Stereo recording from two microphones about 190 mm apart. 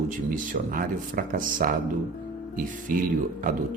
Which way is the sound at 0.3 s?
45° right (ahead or behind).